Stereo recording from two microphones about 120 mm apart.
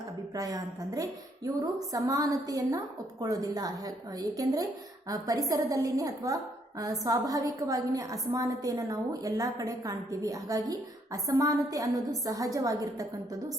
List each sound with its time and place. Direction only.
0.3 s a woman's voice: 30° right (ahead or behind)